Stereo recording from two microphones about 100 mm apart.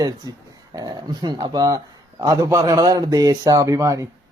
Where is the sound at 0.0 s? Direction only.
40° right (ahead or behind).